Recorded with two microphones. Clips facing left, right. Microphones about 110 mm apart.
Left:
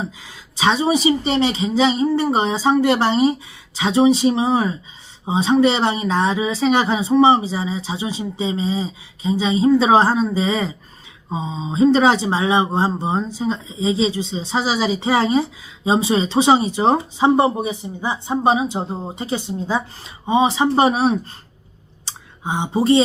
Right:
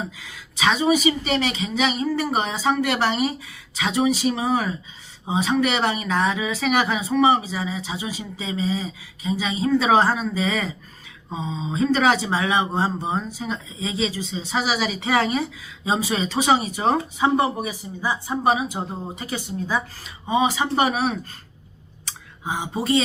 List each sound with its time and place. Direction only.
0.2 s speech: 25° left (ahead or behind)
22.0 s clicking: 25° left (ahead or behind)